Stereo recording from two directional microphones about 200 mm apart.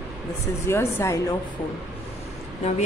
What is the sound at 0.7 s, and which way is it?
Speech, 10° left (ahead or behind).